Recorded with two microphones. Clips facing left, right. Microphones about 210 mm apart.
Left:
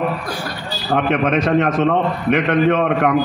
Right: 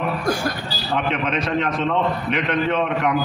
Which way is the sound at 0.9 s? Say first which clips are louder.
Left 6 dB; 50° left (ahead or behind).